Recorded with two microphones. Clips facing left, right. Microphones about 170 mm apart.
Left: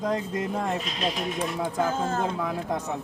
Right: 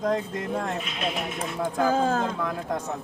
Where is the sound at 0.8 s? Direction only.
35° left (ahead or behind).